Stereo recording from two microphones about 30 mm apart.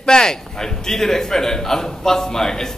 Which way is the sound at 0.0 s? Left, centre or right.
Left.